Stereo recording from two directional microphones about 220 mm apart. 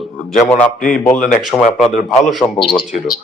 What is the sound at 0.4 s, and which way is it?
A man's voice, 5° left (ahead or behind).